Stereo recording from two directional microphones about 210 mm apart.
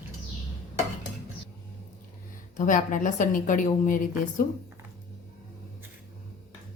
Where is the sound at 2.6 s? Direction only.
40° left (ahead or behind).